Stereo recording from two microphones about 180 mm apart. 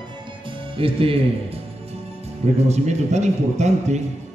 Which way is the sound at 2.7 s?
40° right (ahead or behind).